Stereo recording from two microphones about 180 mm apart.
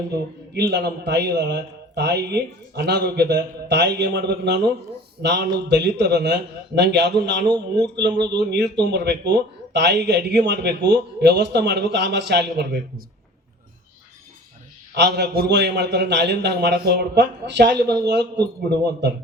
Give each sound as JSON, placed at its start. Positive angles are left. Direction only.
{"t": 0.1, "sound": "a man's voice", "side_deg": -65}
{"t": 14.9, "sound": "a man's voice", "side_deg": -70}